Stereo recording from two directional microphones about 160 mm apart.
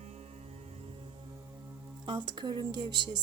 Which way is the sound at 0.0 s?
40° right (ahead or behind).